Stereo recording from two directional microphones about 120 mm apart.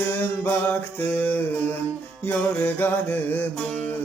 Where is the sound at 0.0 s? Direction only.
20° left (ahead or behind).